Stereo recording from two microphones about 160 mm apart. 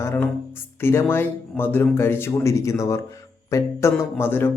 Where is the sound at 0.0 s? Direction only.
15° left (ahead or behind).